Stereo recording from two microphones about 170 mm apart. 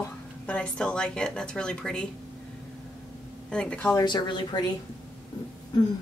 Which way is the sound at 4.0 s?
25° left (ahead or behind).